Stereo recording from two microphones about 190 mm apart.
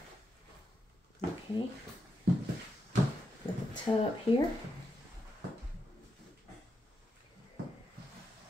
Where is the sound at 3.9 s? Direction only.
25° left (ahead or behind).